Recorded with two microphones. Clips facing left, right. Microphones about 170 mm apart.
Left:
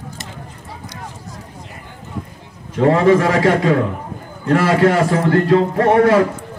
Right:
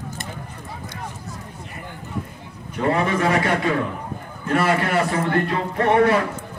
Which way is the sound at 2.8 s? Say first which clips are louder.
Left 8 dB; 90° left.